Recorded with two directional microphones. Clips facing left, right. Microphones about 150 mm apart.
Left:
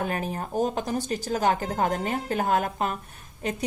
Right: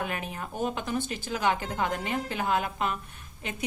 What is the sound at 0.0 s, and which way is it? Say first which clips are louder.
Speech: left 5 dB; 40° left (ahead or behind).